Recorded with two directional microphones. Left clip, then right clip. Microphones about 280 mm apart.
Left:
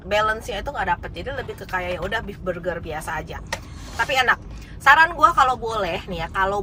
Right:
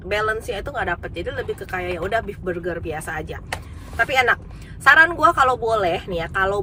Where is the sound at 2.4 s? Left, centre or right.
Centre.